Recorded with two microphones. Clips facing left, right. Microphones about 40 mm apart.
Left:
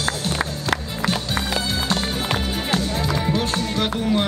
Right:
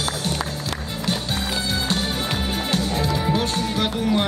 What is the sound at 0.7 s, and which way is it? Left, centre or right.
Music, left.